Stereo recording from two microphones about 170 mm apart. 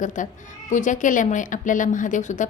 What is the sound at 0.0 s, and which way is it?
A woman's voice, 50° left (ahead or behind).